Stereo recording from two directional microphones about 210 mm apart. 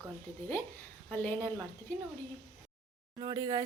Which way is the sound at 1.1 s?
10° left (ahead or behind).